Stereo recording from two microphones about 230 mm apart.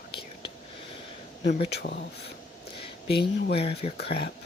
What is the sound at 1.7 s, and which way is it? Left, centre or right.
Speech, left.